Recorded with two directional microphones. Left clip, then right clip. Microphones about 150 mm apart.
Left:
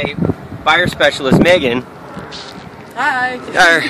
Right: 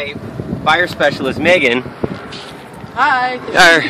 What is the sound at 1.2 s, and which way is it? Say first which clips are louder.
Speech: left 2 dB; 25° left (ahead or behind).